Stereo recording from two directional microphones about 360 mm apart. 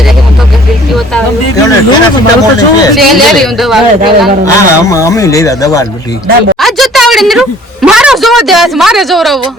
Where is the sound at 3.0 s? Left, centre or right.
Centre.